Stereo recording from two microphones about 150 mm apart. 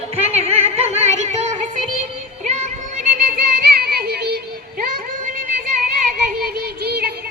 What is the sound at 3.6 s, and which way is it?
Music, 90° right.